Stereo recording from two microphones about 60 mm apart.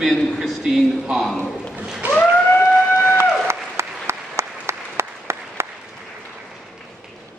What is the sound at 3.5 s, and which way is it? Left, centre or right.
Applause, right.